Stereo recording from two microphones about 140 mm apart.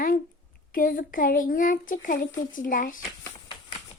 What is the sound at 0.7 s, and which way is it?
Speech, 85° left.